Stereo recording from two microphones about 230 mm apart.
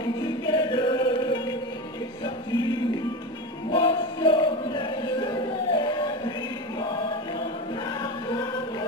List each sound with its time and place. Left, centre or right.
0.5 s chant: centre
2.2 s music: centre
5.8 s a sound: centre
7.8 s choir: centre